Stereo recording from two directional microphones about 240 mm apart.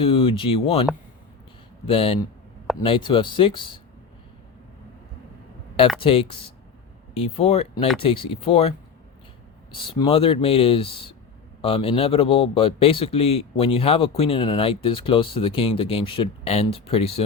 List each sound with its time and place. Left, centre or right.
0.0 s a man's voice: left
1.9 s a man's voice: left
6.0 s a man's voice: left
9.7 s a man's voice: left